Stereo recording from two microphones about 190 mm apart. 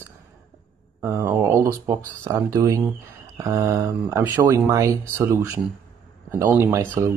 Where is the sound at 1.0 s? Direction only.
15° right (ahead or behind).